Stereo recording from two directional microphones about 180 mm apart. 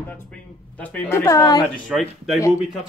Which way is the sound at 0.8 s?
10° left (ahead or behind).